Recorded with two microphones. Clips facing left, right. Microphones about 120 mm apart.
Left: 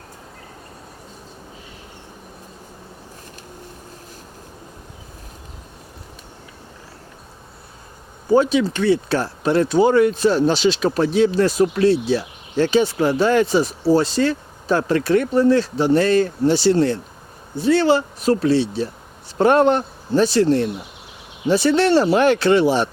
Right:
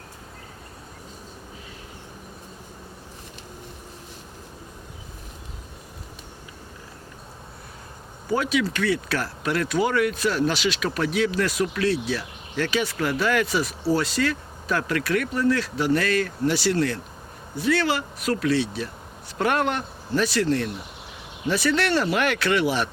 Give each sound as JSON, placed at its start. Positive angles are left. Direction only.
{"t": 8.3, "sound": "speech", "side_deg": 30}